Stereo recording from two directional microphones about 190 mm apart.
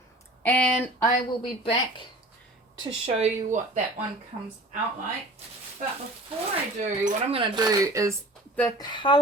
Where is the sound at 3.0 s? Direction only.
35° right (ahead or behind).